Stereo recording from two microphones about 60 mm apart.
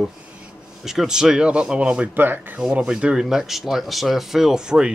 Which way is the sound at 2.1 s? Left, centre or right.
Right.